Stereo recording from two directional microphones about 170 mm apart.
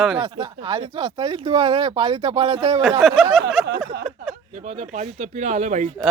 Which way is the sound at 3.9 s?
75° right (ahead or behind).